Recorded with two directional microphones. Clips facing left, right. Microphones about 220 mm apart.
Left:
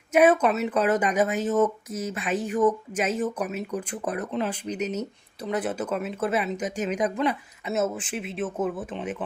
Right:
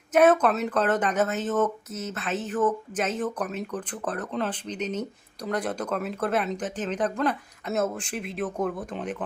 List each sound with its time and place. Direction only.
0.1 s speech: 10° left (ahead or behind)